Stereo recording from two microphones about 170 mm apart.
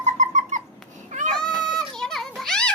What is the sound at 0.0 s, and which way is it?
Cat, 45° right (ahead or behind).